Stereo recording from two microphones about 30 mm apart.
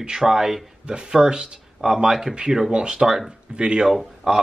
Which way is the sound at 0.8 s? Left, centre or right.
Right.